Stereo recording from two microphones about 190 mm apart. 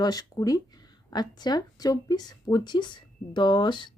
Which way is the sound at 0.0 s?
20° left (ahead or behind).